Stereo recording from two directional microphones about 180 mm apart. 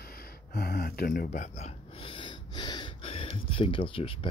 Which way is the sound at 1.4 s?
35° left (ahead or behind).